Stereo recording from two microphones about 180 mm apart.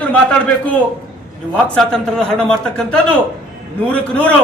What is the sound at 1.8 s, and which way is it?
A man's voice, 5° left (ahead or behind).